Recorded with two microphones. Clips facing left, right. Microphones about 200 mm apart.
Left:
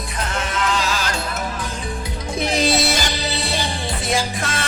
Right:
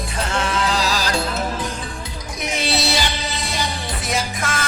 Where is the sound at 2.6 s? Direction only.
45° left (ahead or behind).